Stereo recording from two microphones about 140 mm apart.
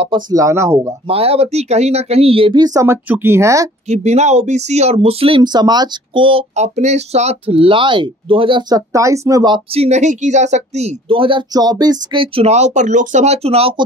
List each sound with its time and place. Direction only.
0.0 s speech: 30° right (ahead or behind)
1.0 s speech: 45° right (ahead or behind); by 3.7 s 20° right (ahead or behind)
3.8 s speech: 50° right (ahead or behind)
6.5 s speech: 55° right (ahead or behind); by 9.6 s 25° right (ahead or behind)
9.7 s speech: 50° right (ahead or behind)